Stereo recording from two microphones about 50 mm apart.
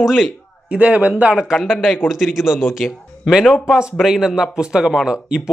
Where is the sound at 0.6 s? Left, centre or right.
Right.